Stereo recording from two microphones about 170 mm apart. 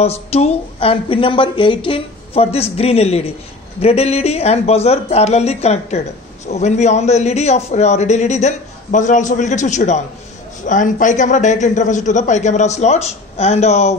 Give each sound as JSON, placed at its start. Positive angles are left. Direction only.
{"t": 0.0, "sound": "a woman's voice", "side_deg": 40}